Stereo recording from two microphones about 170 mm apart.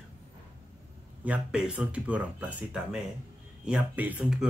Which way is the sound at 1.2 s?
5° right (ahead or behind).